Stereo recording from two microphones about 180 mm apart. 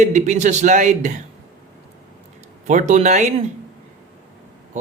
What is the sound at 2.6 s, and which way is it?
Speech, 40° right (ahead or behind).